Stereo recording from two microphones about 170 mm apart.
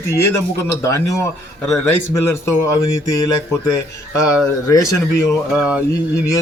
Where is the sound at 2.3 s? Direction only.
15° left (ahead or behind).